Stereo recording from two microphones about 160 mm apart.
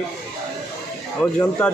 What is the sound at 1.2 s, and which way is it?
Speech, 20° left (ahead or behind).